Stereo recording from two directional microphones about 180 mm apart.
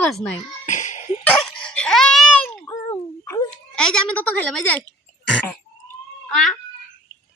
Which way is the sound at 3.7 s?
5° left (ahead or behind).